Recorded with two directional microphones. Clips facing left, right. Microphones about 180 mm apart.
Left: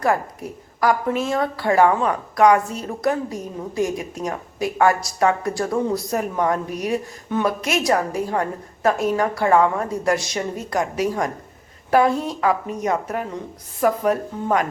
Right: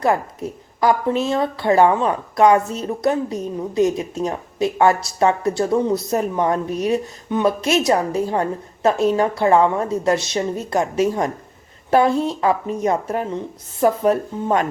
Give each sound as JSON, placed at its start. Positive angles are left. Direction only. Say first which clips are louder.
{"t": 0.8, "sound": "a woman's voice", "louder": "right 2 dB", "side_deg": -25}